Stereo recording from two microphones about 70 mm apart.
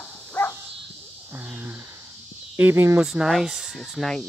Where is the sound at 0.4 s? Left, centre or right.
Left.